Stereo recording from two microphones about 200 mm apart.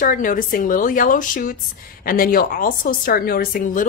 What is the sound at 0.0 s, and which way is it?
Speech, 40° left (ahead or behind).